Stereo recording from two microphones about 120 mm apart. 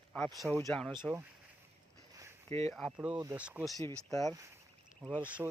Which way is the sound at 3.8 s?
30° left (ahead or behind).